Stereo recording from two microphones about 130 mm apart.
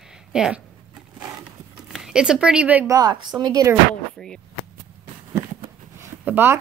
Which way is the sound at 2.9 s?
25° right (ahead or behind).